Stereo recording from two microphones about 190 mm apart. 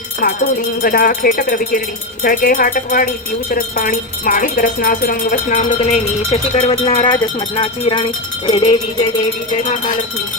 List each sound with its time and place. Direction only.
0.2 s speech: 50° left (ahead or behind); by 9.0 s 30° left (ahead or behind)